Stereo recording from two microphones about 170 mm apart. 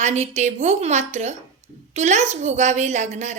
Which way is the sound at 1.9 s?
45° right (ahead or behind).